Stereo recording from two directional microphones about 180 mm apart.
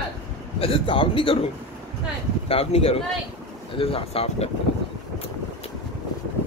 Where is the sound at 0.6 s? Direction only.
30° left (ahead or behind).